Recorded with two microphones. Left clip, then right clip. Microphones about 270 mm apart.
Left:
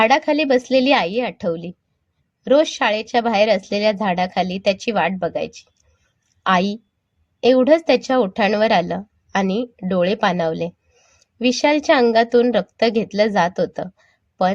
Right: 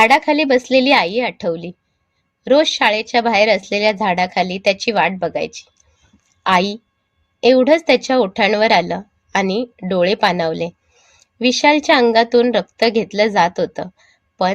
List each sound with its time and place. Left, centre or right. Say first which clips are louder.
0.0 s a woman's voice: right 3 dB; right